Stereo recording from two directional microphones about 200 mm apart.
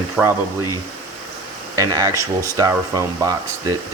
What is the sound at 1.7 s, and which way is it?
Speech, 15° right (ahead or behind).